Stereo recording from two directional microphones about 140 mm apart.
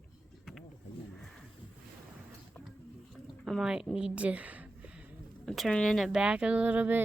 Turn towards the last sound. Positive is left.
turn(degrees=-10)  # may be behind; listen again after turning